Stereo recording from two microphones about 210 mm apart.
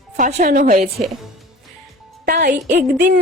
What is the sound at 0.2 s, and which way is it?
Speech, 35° right (ahead or behind).